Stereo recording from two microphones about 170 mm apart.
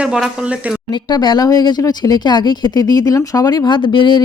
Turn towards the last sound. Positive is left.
turn(degrees=25)  # may be behind; listen again after turning